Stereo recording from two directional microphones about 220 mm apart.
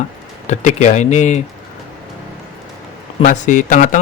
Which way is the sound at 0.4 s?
35° left (ahead or behind).